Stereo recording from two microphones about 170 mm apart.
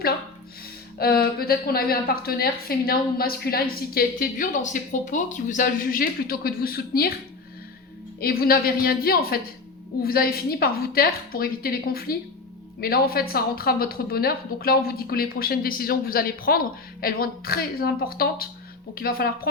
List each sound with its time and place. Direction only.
0.9 s a woman's voice: 65° left (ahead or behind)
8.2 s a woman's voice: 60° left (ahead or behind)